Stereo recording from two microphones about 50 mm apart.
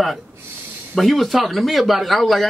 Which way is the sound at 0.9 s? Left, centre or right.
Centre.